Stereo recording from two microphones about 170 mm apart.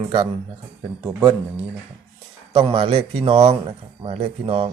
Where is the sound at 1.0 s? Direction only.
10° right (ahead or behind).